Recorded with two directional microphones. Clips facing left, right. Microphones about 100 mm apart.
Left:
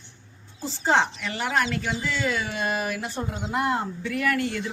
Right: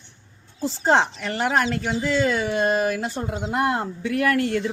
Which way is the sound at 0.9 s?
50° right (ahead or behind).